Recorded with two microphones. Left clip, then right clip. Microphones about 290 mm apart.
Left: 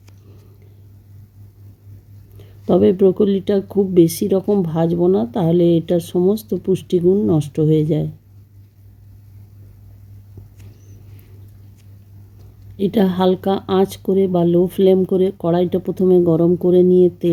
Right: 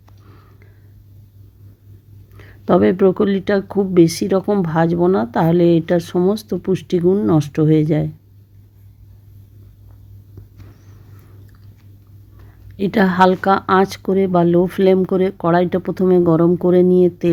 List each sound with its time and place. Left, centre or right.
2.8 s speech: centre
7.0 s speech: right
7.3 s speech: centre
12.7 s speech: centre